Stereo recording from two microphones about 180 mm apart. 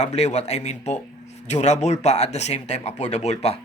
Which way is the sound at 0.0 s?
40° left (ahead or behind).